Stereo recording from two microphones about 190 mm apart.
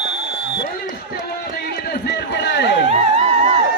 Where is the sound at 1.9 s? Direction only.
65° left (ahead or behind).